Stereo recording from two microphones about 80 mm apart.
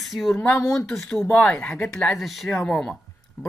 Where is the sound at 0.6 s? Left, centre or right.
Left.